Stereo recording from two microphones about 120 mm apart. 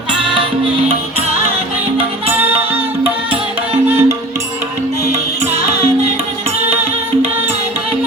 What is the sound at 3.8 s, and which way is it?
Music, 20° right (ahead or behind).